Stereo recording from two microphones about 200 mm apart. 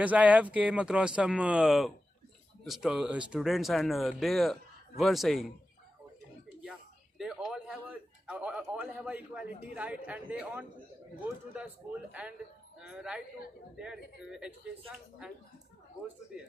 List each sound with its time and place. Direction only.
0.0 s speech: 5° right (ahead or behind)
7.2 s a sound: 5° right (ahead or behind)
9.7 s speech: 5° right (ahead or behind)